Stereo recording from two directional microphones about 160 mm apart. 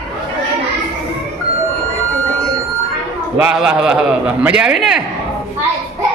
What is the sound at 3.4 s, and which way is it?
A man's voice, 10° right (ahead or behind).